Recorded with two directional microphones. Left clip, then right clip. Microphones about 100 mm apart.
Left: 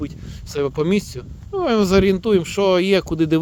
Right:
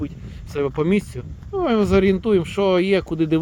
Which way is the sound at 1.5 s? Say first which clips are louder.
Left 1 dB; 30° left (ahead or behind).